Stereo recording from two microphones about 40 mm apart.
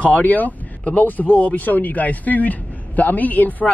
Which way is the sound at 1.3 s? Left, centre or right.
Left.